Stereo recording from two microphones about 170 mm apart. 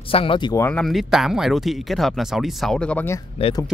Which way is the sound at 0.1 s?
30° left (ahead or behind).